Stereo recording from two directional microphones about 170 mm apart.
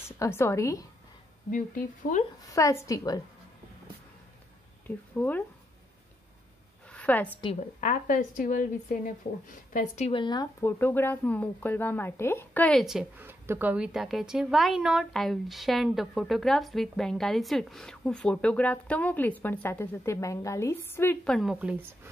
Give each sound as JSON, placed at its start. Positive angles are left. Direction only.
{"t": 0.2, "sound": "a woman's voice", "side_deg": 15}
{"t": 1.5, "sound": "speech", "side_deg": 50}
{"t": 2.5, "sound": "a woman's voice", "side_deg": 15}
{"t": 4.8, "sound": "speech", "side_deg": 10}
{"t": 6.9, "sound": "a sound", "side_deg": 10}
{"t": 7.8, "sound": "speech", "side_deg": 50}
{"t": 10.2, "sound": "speech", "side_deg": 25}